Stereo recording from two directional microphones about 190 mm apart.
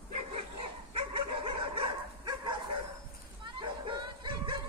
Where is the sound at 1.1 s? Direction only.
25° right (ahead or behind).